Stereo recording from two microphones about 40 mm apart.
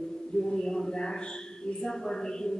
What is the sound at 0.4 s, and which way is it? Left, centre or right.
A woman's voice, centre.